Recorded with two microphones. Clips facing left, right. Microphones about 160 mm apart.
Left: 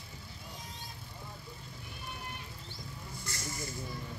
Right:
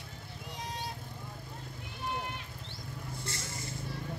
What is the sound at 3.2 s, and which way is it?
Vehicle, 30° right (ahead or behind).